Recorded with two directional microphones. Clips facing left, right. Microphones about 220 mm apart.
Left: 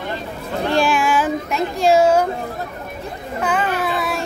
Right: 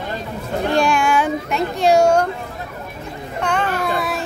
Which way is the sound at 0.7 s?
Centre (ahead or behind).